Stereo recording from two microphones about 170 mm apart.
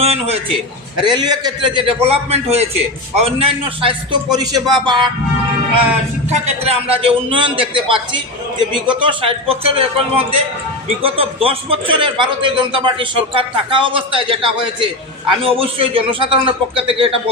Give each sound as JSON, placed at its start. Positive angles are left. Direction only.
{"t": 0.0, "sound": "a man's voice", "side_deg": -35}
{"t": 1.1, "sound": "a man's voice", "side_deg": -25}
{"t": 6.3, "sound": "a man's voice", "side_deg": -40}